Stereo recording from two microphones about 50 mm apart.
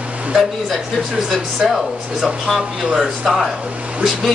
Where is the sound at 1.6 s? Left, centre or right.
Centre.